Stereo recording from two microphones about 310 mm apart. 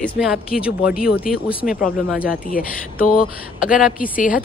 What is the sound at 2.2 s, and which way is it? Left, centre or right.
Speech, left.